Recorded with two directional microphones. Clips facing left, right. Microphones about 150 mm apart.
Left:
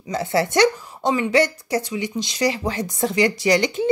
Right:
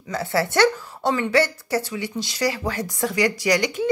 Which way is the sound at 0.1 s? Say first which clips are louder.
Left 2 dB; 20° left (ahead or behind).